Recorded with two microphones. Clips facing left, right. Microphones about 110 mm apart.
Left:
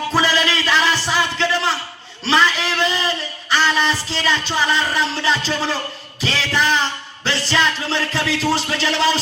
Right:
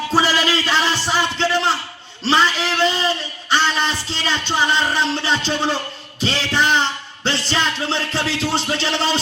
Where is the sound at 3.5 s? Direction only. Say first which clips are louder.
Left 1 dB; 25° right (ahead or behind).